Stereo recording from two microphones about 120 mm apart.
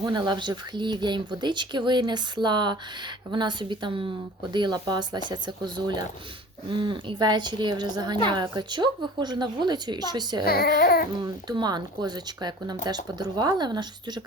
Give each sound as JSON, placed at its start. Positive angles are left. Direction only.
{"t": 0.0, "sound": "speech", "side_deg": -40}